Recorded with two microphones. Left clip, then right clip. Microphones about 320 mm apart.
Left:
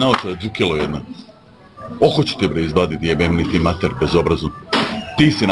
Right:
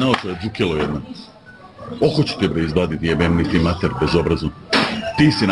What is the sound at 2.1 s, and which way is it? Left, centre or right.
A man's voice, centre.